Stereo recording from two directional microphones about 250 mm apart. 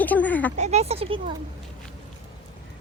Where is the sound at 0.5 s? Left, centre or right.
Right.